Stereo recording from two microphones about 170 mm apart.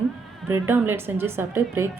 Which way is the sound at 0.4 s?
15° right (ahead or behind).